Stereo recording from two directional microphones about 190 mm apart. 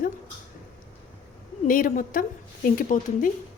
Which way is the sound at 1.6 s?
45° left (ahead or behind).